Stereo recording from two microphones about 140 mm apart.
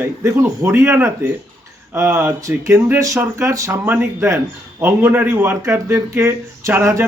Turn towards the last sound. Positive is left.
turn(degrees=-20)  # may be behind; listen again after turning